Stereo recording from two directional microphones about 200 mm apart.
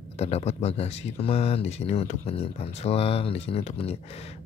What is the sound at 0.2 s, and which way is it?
Speech, 30° left (ahead or behind).